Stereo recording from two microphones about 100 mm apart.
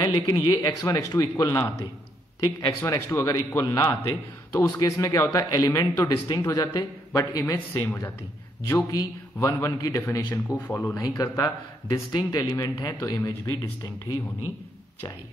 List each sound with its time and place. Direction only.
0.0 s speech: 40° left (ahead or behind)
2.8 s speech: 30° left (ahead or behind)
7.7 s speech: 20° left (ahead or behind)
8.9 s speech: 35° left (ahead or behind)
10.7 s speech: 15° left (ahead or behind)
11.0 s speech: 35° left (ahead or behind)